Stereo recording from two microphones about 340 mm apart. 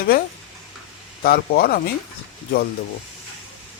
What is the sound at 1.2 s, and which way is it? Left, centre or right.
Speech, left.